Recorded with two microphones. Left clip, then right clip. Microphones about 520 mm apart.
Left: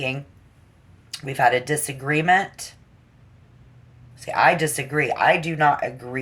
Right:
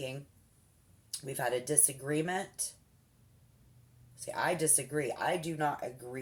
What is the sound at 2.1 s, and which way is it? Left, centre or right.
Speech, centre.